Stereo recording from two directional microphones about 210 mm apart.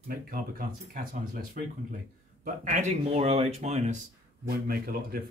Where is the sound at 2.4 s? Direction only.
40° right (ahead or behind).